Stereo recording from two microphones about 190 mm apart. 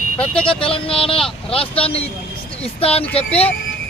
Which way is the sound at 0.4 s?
30° left (ahead or behind).